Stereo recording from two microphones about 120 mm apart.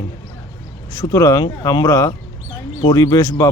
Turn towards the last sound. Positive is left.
turn(degrees=30)  # may be behind; listen again after turning